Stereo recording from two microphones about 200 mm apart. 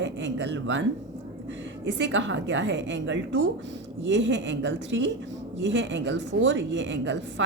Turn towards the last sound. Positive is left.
turn(degrees=-65)  # may be behind; listen again after turning